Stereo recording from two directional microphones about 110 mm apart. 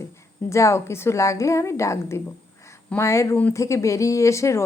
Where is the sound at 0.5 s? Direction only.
25° left (ahead or behind).